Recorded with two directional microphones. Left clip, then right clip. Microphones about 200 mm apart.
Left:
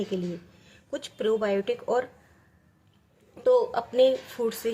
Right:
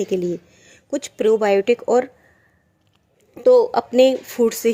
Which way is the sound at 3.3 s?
35° right (ahead or behind).